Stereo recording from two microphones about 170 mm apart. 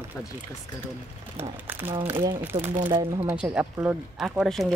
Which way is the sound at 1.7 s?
10° right (ahead or behind).